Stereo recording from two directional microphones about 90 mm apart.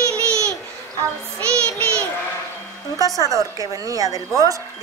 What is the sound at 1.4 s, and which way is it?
Child singing, 15° left (ahead or behind).